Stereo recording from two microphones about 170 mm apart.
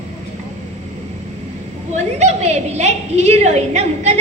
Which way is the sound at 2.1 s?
40° right (ahead or behind).